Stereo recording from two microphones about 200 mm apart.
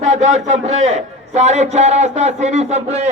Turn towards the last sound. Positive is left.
turn(degrees=-35)  # may be behind; listen again after turning